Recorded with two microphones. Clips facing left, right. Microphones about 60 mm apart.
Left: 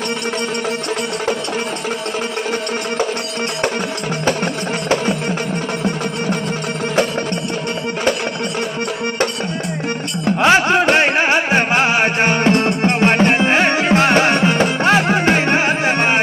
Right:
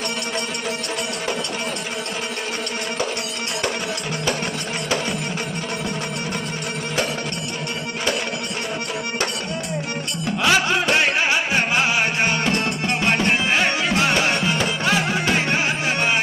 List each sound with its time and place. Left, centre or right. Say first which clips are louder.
10.2 s music: left 6 dB; left